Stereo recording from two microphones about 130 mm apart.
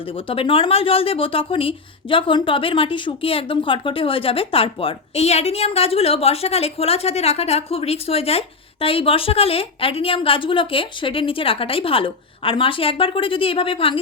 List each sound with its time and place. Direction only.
0.0 s speech: 45° left (ahead or behind)